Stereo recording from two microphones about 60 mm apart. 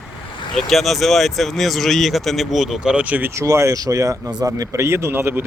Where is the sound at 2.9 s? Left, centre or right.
Right.